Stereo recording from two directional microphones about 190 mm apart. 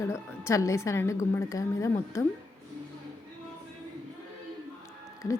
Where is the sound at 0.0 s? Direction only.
15° left (ahead or behind).